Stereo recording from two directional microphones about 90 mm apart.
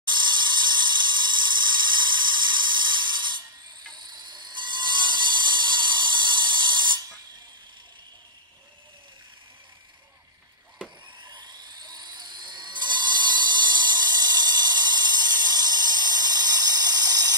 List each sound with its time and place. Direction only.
0.1 s a sound: 55° right (ahead or behind)
3.9 s wood: 55° right (ahead or behind)
11.2 s helicopter: 50° right (ahead or behind)